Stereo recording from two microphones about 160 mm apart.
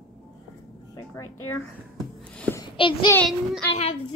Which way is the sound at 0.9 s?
20° left (ahead or behind).